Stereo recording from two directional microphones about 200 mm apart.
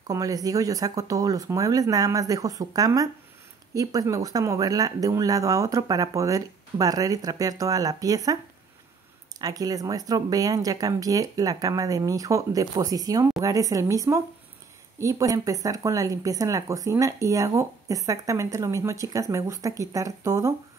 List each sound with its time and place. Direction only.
0.0 s speech: 15° right (ahead or behind)
9.4 s speech: 20° right (ahead or behind)